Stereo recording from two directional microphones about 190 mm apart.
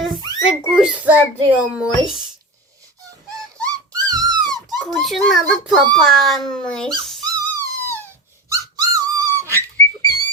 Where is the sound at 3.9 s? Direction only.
20° right (ahead or behind).